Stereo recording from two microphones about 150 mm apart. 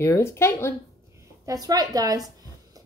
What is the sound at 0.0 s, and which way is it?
Speech, 15° left (ahead or behind).